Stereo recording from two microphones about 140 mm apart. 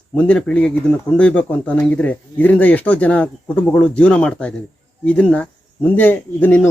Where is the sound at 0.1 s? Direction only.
10° left (ahead or behind).